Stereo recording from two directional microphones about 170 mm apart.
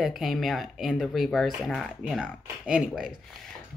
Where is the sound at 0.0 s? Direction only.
Centre (ahead or behind).